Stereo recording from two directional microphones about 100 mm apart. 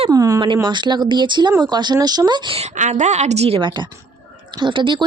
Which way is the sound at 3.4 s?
80° right.